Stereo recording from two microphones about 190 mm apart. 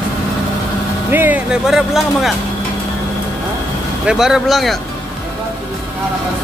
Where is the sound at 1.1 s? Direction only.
10° right (ahead or behind).